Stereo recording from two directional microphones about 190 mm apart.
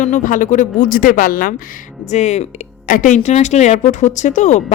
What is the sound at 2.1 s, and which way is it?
Speech, 35° left (ahead or behind).